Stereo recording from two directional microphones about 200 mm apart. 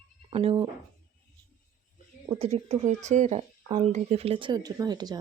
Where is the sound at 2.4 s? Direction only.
30° right (ahead or behind).